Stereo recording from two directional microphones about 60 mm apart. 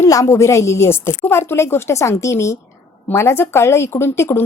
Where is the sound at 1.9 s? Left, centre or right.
Left.